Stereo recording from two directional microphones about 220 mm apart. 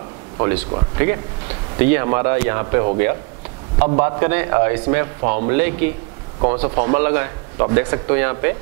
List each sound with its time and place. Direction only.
0.4 s speech: 15° right (ahead or behind)
6.4 s speech: 30° right (ahead or behind)